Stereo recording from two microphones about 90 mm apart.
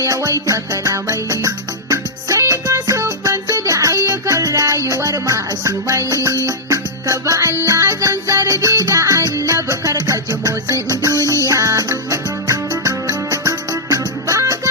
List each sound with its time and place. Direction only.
0.0 s music: 35° right (ahead or behind)